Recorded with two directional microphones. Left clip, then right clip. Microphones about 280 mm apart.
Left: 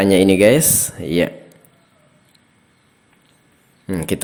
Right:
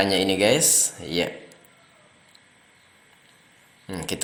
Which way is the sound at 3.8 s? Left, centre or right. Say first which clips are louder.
Left 8 dB; left.